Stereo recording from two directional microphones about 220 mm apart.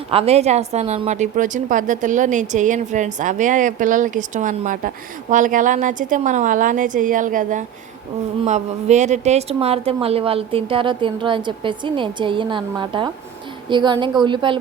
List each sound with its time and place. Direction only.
0.1 s a woman's voice: 25° right (ahead or behind)